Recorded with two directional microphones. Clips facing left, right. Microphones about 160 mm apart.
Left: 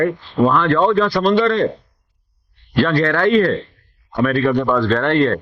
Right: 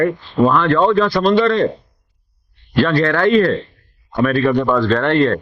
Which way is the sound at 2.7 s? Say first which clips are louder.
Right 1 dB; 20° right (ahead or behind).